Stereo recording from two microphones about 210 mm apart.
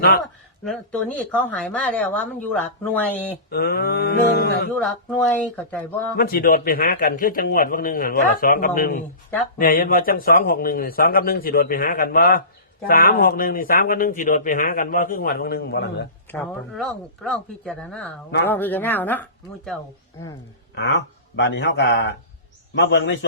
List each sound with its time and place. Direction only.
0.6 s a woman's voice: 5° left (ahead or behind)
3.5 s speech: 45° left (ahead or behind)
4.8 s a woman's voice: 5° left (ahead or behind)
6.1 s speech: 45° left (ahead or behind)
16.3 s a woman's voice: 5° left (ahead or behind)
20.7 s speech: 55° left (ahead or behind)